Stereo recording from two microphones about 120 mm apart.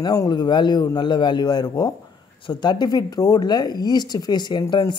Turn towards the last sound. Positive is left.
turn(degrees=35)  # may be behind; listen again after turning